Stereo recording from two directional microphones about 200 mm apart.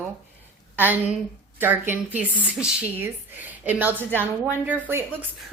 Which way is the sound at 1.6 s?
10° right (ahead or behind).